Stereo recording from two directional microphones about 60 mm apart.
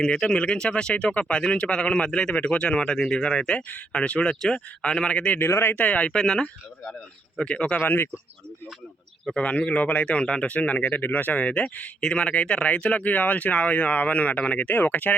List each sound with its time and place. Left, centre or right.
0.0 s speech: centre
5.5 s speech: left
5.7 s speech: left
7.8 s speech: left
9.4 s speech: left